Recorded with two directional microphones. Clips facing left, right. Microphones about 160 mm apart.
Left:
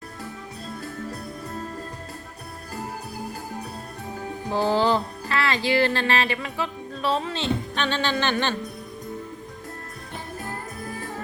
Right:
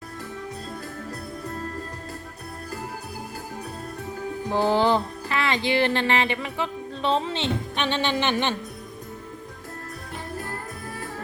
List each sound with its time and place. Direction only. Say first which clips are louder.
4.5 s music: right 1 dB; 15° right (ahead or behind)